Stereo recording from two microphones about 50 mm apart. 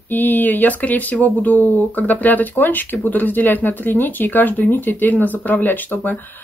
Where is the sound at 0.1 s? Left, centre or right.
Left.